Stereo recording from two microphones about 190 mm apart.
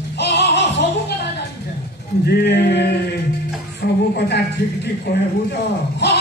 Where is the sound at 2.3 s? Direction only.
60° left (ahead or behind).